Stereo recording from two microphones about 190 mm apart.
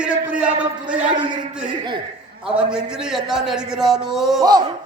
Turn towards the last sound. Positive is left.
turn(degrees=-20)  # may be behind; listen again after turning